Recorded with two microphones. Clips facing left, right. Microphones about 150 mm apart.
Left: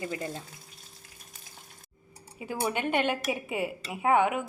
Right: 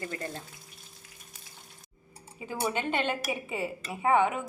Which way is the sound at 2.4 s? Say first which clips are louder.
Left 1 dB; 10° left (ahead or behind).